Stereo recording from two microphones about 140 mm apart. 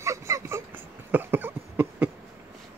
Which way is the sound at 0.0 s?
20° right (ahead or behind).